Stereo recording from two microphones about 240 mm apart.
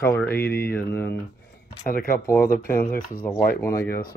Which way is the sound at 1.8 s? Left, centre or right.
Left.